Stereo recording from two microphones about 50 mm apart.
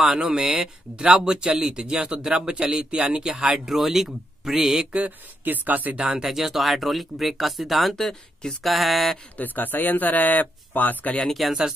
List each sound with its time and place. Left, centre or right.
0.0 s speech: centre
5.4 s speech: right
5.9 s speech: centre
7.9 s speech: centre
8.7 s speech: centre
9.4 s speech: left
11.2 s speech: centre